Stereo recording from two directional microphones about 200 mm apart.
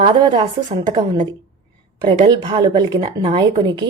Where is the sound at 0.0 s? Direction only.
25° right (ahead or behind).